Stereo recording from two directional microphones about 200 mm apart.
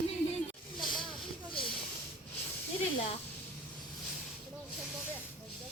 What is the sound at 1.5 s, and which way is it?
Snake, 25° left (ahead or behind).